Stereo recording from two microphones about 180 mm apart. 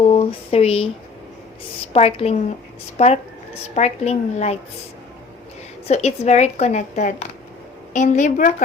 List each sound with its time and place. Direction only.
0.0 s speech: 35° left (ahead or behind)
1.9 s a woman's voice: 35° left (ahead or behind)
5.9 s a woman's voice: 40° left (ahead or behind)